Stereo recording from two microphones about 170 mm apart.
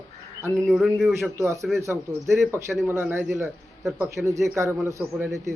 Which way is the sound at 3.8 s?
20° right (ahead or behind).